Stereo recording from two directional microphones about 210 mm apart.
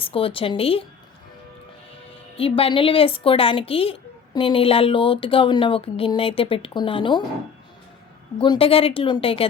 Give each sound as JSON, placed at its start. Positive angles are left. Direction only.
{"t": 0.0, "sound": "speech", "side_deg": 25}
{"t": 2.3, "sound": "speech", "side_deg": 25}
{"t": 8.4, "sound": "speech", "side_deg": 25}